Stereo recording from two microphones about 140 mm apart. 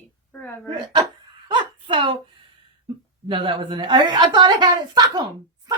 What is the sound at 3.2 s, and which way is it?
A woman's voice, 35° right (ahead or behind).